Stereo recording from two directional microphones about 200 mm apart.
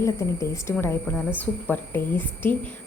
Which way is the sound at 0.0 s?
15° left (ahead or behind).